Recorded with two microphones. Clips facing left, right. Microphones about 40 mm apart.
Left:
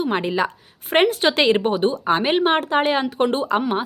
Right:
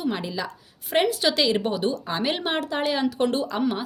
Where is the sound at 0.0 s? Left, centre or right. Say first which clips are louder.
Left 7 dB; left.